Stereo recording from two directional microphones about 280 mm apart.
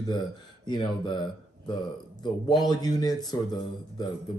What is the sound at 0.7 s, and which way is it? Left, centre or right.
Speech, centre.